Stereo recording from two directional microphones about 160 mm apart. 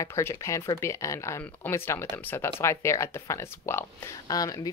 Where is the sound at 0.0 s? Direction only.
15° left (ahead or behind).